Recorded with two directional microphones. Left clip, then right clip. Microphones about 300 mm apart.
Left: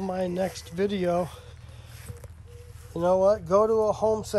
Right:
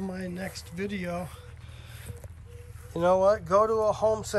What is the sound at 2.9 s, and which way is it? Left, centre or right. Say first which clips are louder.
Speech: left 1 dB; centre.